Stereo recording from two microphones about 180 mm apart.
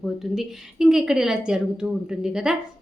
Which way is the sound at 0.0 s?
Centre (ahead or behind).